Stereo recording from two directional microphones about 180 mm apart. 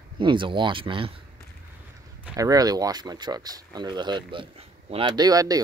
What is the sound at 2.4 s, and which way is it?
Speech, 20° right (ahead or behind).